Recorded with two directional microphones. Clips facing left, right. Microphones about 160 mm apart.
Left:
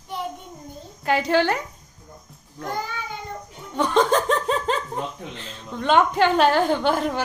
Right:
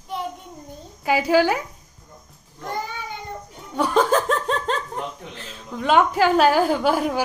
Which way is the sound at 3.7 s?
5° right (ahead or behind).